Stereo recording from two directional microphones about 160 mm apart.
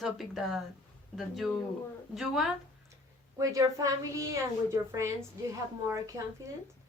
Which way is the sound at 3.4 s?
20° right (ahead or behind).